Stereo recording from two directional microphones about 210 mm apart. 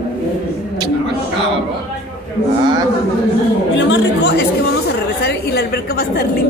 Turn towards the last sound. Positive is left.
turn(degrees=50)  # may be behind; listen again after turning